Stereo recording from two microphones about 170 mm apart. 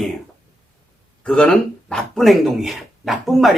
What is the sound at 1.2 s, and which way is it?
Speech, 5° left (ahead or behind).